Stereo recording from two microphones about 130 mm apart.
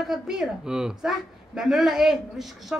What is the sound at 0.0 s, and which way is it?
Speech, 5° right (ahead or behind).